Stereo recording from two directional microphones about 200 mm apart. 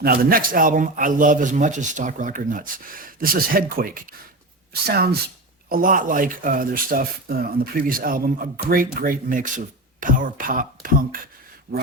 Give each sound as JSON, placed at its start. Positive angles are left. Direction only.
{"t": 0.0, "sound": "speech", "side_deg": -45}